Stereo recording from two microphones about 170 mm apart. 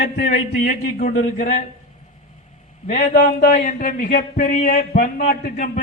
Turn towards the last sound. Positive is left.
turn(degrees=50)  # may be behind; listen again after turning